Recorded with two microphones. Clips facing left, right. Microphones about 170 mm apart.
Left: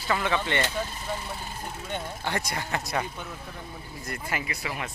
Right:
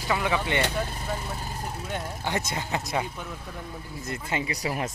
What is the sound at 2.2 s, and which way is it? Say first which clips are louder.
Speech: right 2 dB; 20° right (ahead or behind).